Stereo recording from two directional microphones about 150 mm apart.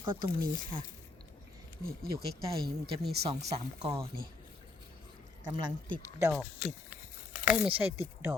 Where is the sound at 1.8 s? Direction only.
85° right.